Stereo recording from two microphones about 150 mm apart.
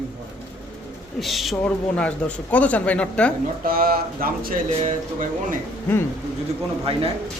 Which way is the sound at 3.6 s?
80° right.